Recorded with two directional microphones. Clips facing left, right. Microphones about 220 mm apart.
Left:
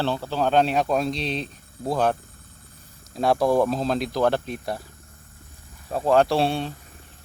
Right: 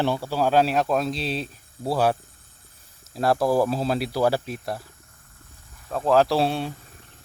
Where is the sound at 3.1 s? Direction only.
Centre (ahead or behind).